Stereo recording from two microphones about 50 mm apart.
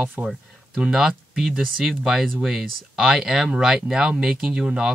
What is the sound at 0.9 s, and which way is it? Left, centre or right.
Speech, centre.